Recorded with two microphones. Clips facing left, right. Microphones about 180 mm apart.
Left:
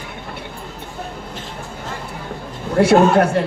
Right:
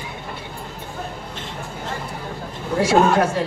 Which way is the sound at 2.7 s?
60° left (ahead or behind).